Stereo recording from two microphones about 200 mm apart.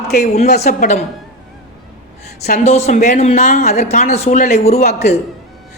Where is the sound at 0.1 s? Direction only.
35° left (ahead or behind).